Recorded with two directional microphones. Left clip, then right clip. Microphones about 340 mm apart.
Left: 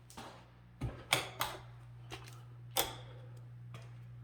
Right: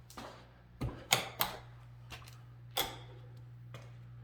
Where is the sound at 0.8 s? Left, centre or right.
Right.